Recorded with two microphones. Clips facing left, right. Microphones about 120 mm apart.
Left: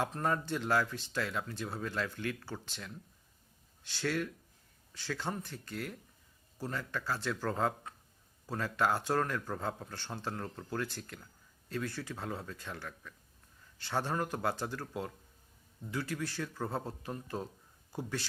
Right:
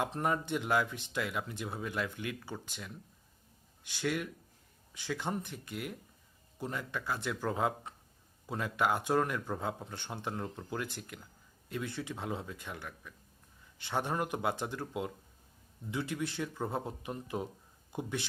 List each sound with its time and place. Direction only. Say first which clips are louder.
0.0 s speech: right 1 dB; 15° right (ahead or behind)